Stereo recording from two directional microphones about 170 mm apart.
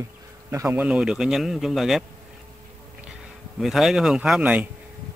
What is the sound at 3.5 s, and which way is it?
Speech, centre (ahead or behind).